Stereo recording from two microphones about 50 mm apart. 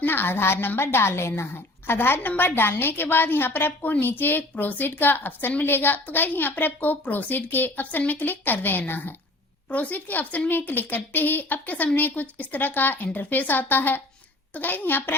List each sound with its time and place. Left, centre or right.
0.0 s a woman's voice: left
9.6 s a woman's voice: left